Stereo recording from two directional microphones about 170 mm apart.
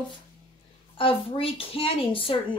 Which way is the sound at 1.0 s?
30° left (ahead or behind).